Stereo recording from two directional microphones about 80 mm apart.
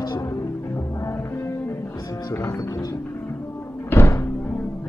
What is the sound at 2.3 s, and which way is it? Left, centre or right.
Music, left.